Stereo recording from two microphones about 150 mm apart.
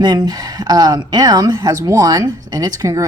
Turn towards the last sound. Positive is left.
turn(degrees=-20)  # may be behind; listen again after turning